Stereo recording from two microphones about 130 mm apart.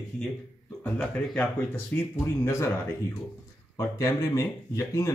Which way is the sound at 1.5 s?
15° left (ahead or behind).